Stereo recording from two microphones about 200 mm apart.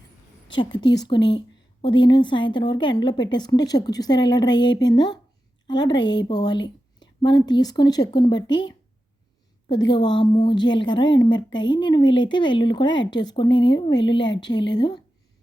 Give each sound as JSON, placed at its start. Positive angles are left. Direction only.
{"t": 0.5, "sound": "a woman's voice", "side_deg": 25}
{"t": 1.2, "sound": "speech", "side_deg": 60}
{"t": 1.8, "sound": "a woman's voice", "side_deg": 20}
{"t": 9.6, "sound": "a woman's voice", "side_deg": 20}